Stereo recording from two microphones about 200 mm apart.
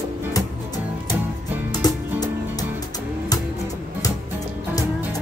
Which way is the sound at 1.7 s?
20° left (ahead or behind).